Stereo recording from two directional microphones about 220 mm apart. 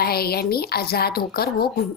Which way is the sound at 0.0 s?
45° left (ahead or behind).